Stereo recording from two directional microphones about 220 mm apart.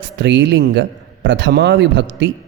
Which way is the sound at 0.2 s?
55° right (ahead or behind).